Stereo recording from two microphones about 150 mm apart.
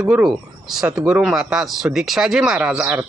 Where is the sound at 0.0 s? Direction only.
5° right (ahead or behind).